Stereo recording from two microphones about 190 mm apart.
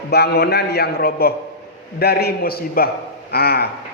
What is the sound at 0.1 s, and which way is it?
A man's voice, 60° left (ahead or behind).